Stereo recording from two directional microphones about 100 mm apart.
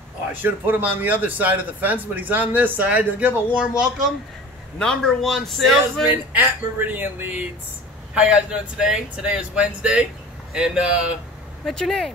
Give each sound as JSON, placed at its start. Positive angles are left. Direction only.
{"t": 0.3, "sound": "a man's voice", "side_deg": -20}
{"t": 4.7, "sound": "a man's voice", "side_deg": 5}
{"t": 6.0, "sound": "a man's voice", "side_deg": -20}
{"t": 11.6, "sound": "a man's voice", "side_deg": 5}